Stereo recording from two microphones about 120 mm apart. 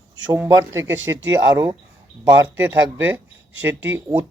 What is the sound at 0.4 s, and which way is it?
Speech, 25° right (ahead or behind).